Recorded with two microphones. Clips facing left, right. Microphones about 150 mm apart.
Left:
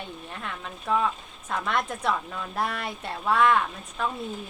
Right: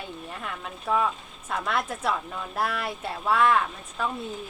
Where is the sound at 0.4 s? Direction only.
5° right (ahead or behind).